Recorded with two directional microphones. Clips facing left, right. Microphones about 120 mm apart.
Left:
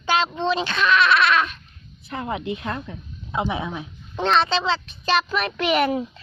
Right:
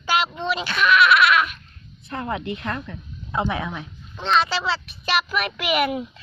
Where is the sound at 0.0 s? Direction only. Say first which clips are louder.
Left 2 dB; 20° left (ahead or behind).